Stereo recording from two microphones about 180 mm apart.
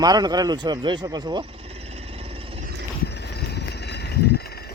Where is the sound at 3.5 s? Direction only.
65° left (ahead or behind).